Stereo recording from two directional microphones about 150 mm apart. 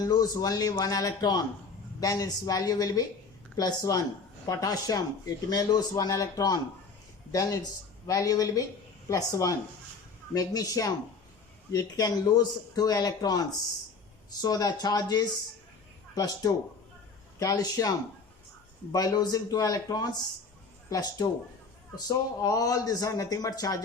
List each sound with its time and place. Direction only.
0.0 s a man's voice: 25° left (ahead or behind)